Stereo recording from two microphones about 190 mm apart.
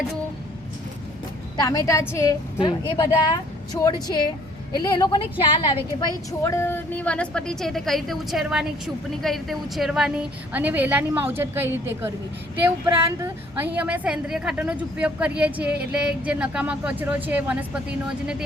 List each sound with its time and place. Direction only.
1.5 s a woman's voice: 20° left (ahead or behind)
2.6 s speech: 25° left (ahead or behind)
6.4 s a woman's voice: 15° left (ahead or behind); by 17.7 s 10° right (ahead or behind)